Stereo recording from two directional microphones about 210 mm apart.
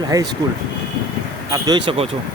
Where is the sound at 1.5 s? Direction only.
20° right (ahead or behind).